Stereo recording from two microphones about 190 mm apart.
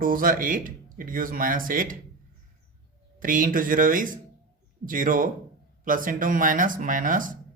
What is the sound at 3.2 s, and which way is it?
Speech, 45° right (ahead or behind).